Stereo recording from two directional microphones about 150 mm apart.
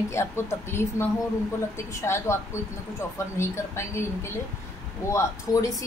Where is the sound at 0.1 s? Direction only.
15° left (ahead or behind).